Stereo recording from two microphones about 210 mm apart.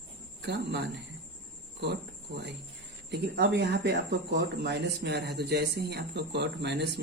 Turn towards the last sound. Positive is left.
turn(degrees=-55)  # may be behind; listen again after turning